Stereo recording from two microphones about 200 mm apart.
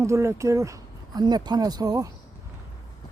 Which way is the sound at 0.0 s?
15° right (ahead or behind).